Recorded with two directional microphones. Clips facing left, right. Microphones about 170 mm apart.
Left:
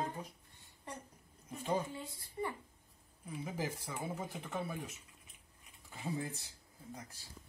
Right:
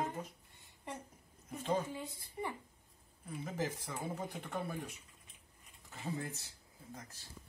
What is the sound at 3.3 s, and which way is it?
Speech, 10° left (ahead or behind).